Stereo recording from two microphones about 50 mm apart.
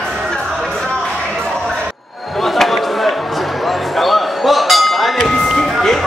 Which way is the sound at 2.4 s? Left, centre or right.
Centre.